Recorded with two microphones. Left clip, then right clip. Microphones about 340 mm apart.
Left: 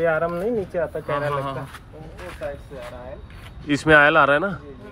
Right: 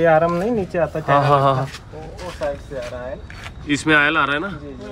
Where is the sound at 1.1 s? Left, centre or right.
Centre.